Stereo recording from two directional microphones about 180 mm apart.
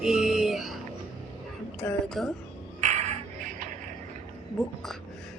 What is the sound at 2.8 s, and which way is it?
Music, 40° right (ahead or behind).